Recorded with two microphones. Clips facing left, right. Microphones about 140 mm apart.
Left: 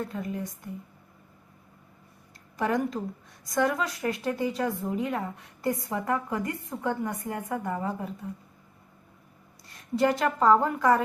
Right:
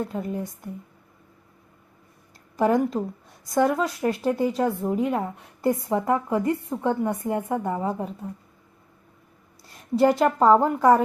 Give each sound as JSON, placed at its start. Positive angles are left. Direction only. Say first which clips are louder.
{"t": 0.1, "sound": "a woman's voice", "louder": "right 4 dB", "side_deg": -30}
{"t": 2.6, "sound": "a woman's voice", "louder": "right 6 dB", "side_deg": -30}
{"t": 10.0, "sound": "a woman's voice", "louder": "right 5 dB", "side_deg": -30}